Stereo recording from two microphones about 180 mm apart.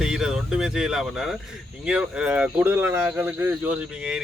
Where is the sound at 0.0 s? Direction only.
5° right (ahead or behind).